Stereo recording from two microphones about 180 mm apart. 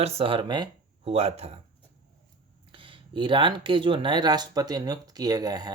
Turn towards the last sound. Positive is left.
turn(degrees=-20)  # may be behind; listen again after turning